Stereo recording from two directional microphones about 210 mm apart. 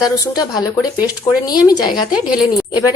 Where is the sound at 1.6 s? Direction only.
20° left (ahead or behind).